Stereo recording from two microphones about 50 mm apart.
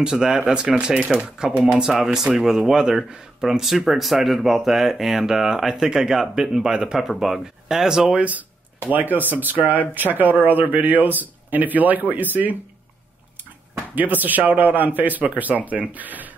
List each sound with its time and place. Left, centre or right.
0.0 s speech: centre
8.2 s speech: right
13.9 s speech: right